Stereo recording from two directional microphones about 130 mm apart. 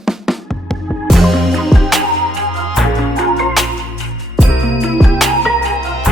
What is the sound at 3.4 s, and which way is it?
Music, centre (ahead or behind).